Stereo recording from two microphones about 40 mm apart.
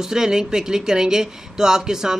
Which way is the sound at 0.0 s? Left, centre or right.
Centre.